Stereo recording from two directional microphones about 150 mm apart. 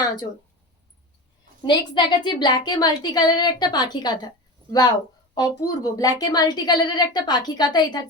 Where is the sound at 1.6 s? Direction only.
30° left (ahead or behind).